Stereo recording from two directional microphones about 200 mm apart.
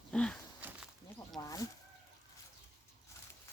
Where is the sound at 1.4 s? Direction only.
15° left (ahead or behind).